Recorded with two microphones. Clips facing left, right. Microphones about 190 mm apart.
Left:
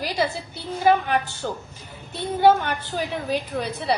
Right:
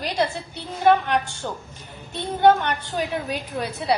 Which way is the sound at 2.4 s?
5° left (ahead or behind).